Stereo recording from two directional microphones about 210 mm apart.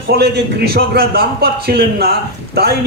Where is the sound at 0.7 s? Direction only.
50° right (ahead or behind).